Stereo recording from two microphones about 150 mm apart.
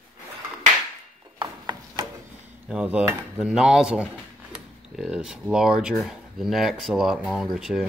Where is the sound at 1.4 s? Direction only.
30° right (ahead or behind).